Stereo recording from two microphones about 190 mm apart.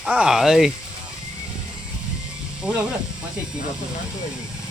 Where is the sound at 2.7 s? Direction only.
5° right (ahead or behind).